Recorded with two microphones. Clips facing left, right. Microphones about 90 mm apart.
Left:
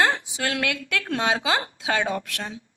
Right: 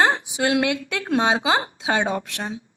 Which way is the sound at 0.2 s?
20° right (ahead or behind).